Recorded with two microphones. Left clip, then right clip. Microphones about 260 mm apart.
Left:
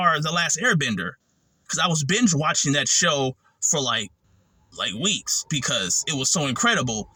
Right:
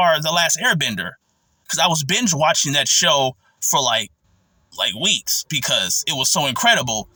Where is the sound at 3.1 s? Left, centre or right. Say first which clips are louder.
Right 7 dB; centre.